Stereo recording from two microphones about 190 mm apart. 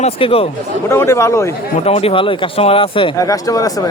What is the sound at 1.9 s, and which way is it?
Speech, 30° left (ahead or behind).